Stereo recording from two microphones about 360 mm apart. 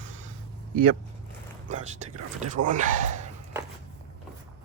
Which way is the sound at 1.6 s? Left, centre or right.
Centre.